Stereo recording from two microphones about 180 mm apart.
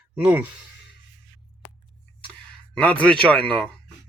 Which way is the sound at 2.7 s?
5° left (ahead or behind).